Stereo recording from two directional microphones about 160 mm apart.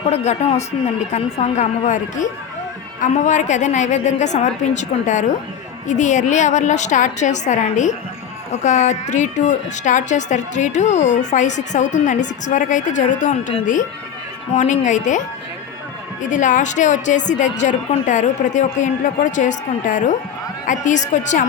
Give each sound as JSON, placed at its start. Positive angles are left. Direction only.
{"t": 0.1, "sound": "a woman's voice", "side_deg": 40}
{"t": 14.5, "sound": "a woman's voice", "side_deg": 50}
{"t": 16.3, "sound": "a woman's voice", "side_deg": 50}